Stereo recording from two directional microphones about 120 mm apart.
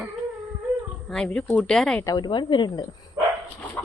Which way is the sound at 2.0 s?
35° left (ahead or behind).